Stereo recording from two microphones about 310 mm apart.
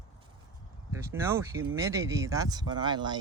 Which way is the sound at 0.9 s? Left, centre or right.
Centre.